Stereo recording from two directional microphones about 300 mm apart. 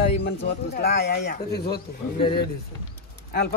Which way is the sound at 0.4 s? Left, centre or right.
Left.